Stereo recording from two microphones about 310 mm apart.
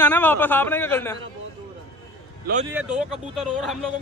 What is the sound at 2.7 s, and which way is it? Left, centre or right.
Speech, centre.